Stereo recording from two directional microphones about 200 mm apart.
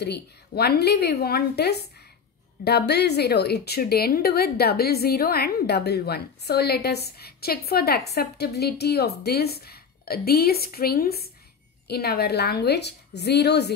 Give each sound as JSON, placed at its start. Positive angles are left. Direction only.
{"t": 0.0, "sound": "a woman's voice", "side_deg": 55}